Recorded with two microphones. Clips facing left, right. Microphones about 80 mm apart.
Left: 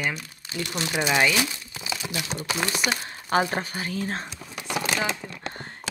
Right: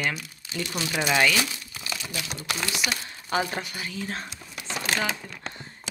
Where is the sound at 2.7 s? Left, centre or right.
Left.